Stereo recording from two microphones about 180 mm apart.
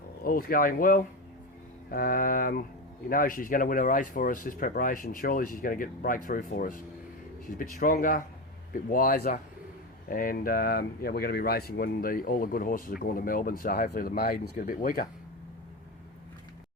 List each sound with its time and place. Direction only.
0.3 s speech: 55° left (ahead or behind)